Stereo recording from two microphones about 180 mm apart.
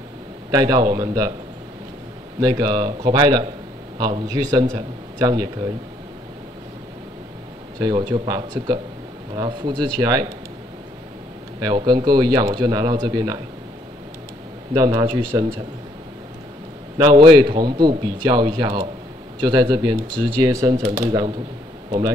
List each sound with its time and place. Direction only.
0.5 s a man's voice: 20° right (ahead or behind)
2.4 s a man's voice: 20° right (ahead or behind)
7.8 s a man's voice: 25° right (ahead or behind)
11.6 s a man's voice: 25° right (ahead or behind)
14.7 s a man's voice: 20° right (ahead or behind)
17.0 s a man's voice: 25° right (ahead or behind)